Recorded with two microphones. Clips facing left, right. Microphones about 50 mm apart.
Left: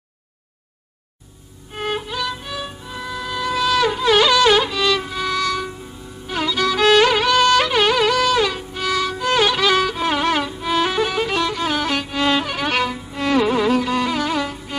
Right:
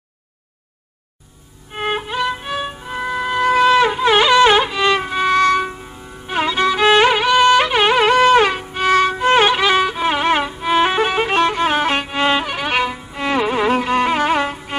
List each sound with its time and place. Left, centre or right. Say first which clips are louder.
1.7 s music: right 3 dB; right
13.7 s music: right 3 dB; right